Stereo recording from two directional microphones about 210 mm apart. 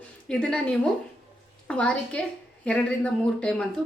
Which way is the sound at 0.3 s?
5° left (ahead or behind).